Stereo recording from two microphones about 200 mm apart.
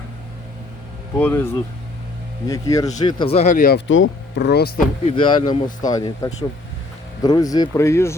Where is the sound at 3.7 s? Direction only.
70° left (ahead or behind); by 4.7 s 55° left (ahead or behind).